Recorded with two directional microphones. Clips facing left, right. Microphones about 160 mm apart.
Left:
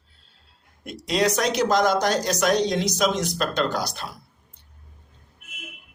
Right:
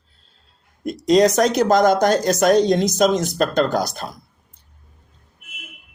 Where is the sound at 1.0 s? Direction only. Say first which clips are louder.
Right 8 dB; 40° right (ahead or behind).